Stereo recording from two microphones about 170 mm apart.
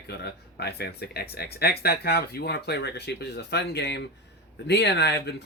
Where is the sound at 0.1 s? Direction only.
70° left (ahead or behind).